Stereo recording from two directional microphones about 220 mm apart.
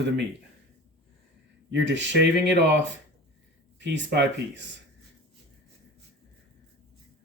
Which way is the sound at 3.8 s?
55° right (ahead or behind).